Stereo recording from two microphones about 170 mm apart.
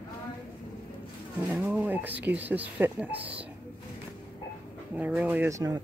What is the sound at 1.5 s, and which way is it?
Speech, 10° right (ahead or behind).